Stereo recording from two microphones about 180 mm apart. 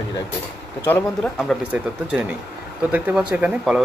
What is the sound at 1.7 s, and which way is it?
Speech, 5° right (ahead or behind).